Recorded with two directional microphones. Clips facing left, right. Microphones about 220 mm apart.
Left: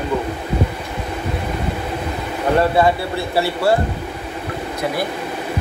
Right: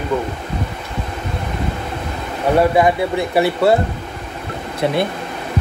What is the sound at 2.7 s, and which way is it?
Speech, 15° right (ahead or behind).